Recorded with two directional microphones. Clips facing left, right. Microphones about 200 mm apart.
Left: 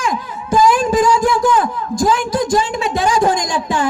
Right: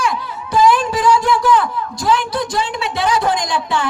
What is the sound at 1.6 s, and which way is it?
A man's voice, 50° left (ahead or behind).